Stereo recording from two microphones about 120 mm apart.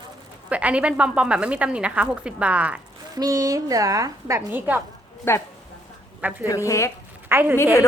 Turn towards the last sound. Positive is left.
turn(degrees=-15)  # may be behind; listen again after turning